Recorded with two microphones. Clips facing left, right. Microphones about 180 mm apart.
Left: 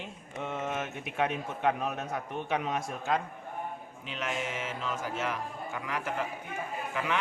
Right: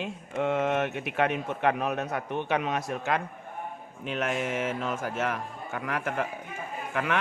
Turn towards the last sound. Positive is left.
turn(degrees=-60)  # may be behind; listen again after turning